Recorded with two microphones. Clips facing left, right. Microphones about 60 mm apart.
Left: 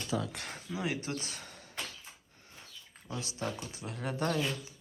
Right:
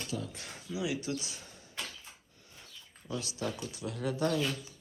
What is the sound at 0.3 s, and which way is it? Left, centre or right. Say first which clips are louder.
Speech: even; left.